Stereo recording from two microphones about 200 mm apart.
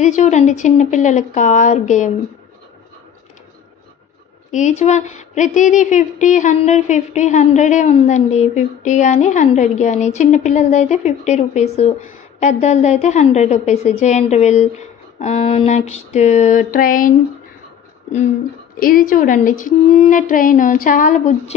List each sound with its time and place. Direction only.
0.0 s speech: 35° left (ahead or behind)
4.5 s speech: 35° left (ahead or behind)
18.8 s speech: 45° left (ahead or behind)